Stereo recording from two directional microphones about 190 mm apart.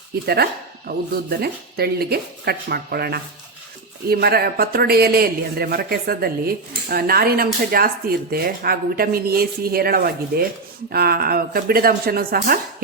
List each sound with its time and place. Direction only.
0.9 s speech: 55° right (ahead or behind)